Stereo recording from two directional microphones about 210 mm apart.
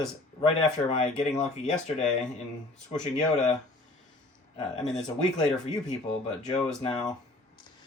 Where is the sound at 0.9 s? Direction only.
30° left (ahead or behind).